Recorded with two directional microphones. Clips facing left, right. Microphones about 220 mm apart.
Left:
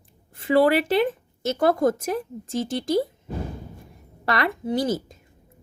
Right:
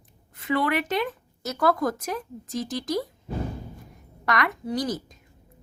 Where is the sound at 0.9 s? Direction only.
30° left (ahead or behind).